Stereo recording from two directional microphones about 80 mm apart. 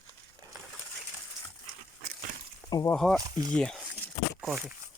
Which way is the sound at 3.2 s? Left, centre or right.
Right.